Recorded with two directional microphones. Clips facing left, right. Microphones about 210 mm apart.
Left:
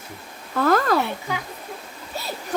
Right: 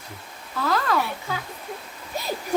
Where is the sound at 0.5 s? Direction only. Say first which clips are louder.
Left 5 dB; 50° left (ahead or behind).